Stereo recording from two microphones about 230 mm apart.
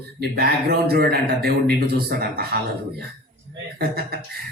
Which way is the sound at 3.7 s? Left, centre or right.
Right.